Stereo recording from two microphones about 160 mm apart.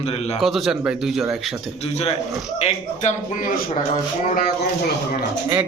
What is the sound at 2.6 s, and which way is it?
Speech, 45° left (ahead or behind).